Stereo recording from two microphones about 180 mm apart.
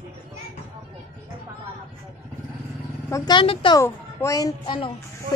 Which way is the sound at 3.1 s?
25° left (ahead or behind).